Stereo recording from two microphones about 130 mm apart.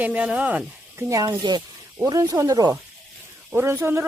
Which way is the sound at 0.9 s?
25° right (ahead or behind).